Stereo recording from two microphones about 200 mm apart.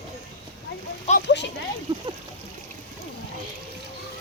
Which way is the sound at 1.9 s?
25° right (ahead or behind).